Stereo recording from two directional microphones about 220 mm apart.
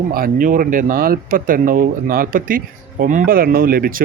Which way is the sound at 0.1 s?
40° right (ahead or behind).